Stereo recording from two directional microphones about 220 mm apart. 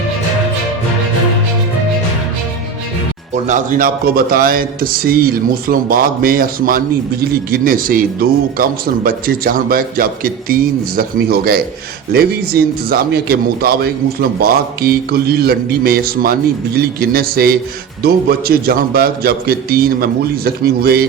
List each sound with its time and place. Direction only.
3.3 s a man's voice: 35° right (ahead or behind)